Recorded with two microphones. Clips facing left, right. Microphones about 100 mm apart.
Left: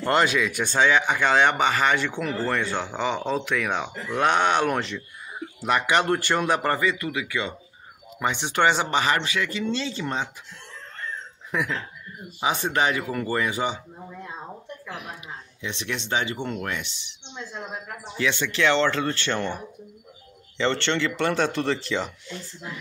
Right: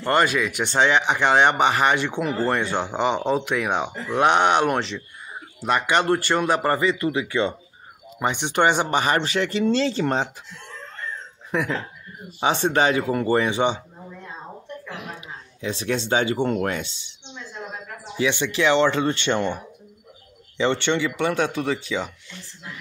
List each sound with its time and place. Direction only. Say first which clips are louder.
0.0 s a man's voice: right 1 dB; centre (ahead or behind)
0.7 s speech: right 1 dB; 20° right (ahead or behind)
5.6 s a man's voice: right 1 dB; 5° left (ahead or behind)
6.8 s speech: right 4 dB; 25° right (ahead or behind)
8.2 s speech: right 2 dB; 20° right (ahead or behind)
9.0 s speech: right 3 dB; 35° right (ahead or behind)
11.5 s speech: right 3 dB; 30° right (ahead or behind)
15.6 s speech: right 7 dB; 35° right (ahead or behind)
18.1 s a man's voice: right 3 dB; 15° right (ahead or behind)